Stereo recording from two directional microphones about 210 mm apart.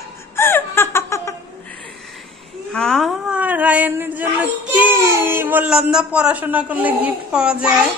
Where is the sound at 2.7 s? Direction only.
5° left (ahead or behind).